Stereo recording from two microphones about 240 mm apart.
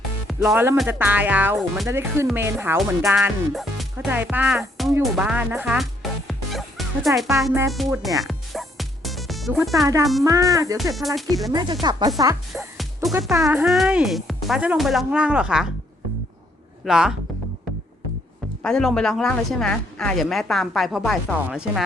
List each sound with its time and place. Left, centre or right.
0.3 s a woman's voice: centre
8.2 s music: centre
9.8 s speech: centre
10.9 s a woman's voice: centre
11.5 s speech: centre
12.5 s music: centre
13.3 s a woman's voice: centre
16.8 s a woman's voice: centre
18.6 s a woman's voice: centre